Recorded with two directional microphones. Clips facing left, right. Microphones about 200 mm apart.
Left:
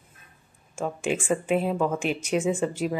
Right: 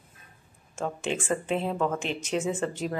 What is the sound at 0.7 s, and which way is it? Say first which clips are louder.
Speech: left 3 dB; 10° left (ahead or behind).